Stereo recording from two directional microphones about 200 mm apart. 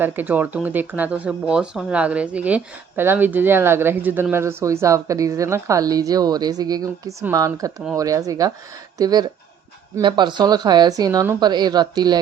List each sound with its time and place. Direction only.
0.0 s speech: 10° right (ahead or behind)